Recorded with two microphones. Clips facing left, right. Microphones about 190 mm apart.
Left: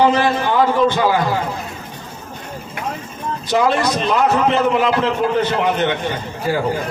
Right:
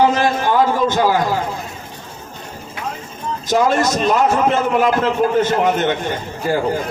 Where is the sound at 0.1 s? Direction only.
45° right (ahead or behind).